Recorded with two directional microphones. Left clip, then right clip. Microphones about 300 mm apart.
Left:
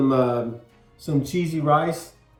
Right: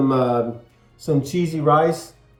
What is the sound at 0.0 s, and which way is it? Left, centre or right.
A woman's voice, centre.